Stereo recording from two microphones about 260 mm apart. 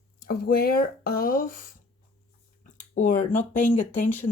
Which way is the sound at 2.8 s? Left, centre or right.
Left.